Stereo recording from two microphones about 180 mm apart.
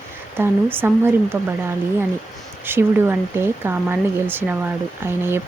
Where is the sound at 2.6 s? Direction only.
10° right (ahead or behind).